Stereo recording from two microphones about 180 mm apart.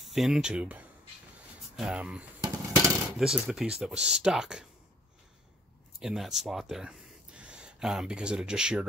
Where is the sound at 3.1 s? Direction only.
Centre (ahead or behind).